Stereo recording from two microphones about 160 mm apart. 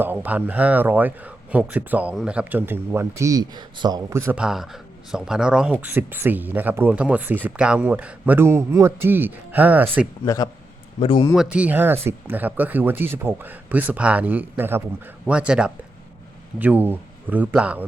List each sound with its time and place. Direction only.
0.0 s speech: 10° right (ahead or behind)
10.2 s a man's voice: 25° left (ahead or behind)
11.3 s speech: 10° right (ahead or behind)